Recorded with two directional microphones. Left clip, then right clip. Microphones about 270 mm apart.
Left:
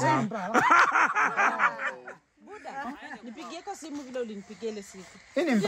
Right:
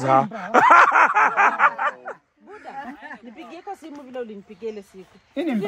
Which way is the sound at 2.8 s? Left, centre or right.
Centre.